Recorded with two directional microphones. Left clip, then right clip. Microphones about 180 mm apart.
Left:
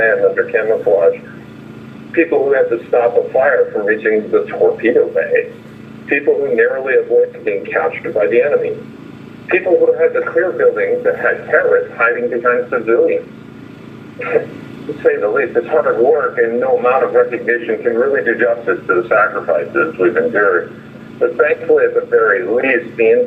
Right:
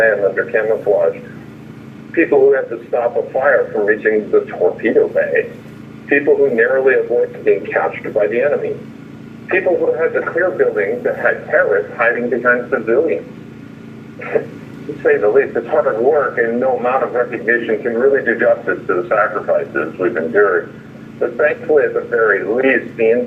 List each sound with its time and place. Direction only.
0.0 s speech: 20° left (ahead or behind)
2.1 s a man's voice: 20° left (ahead or behind)
14.2 s speech: 20° left (ahead or behind)